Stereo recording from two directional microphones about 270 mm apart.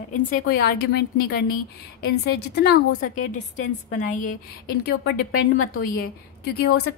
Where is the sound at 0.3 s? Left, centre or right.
Left.